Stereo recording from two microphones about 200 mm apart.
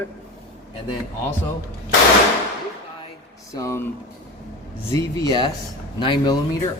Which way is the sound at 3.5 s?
15° left (ahead or behind).